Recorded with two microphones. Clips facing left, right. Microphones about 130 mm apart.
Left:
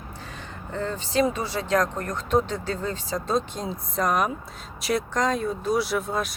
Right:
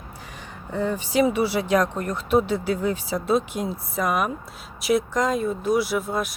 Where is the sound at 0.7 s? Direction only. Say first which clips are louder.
Right 4 dB; 15° right (ahead or behind).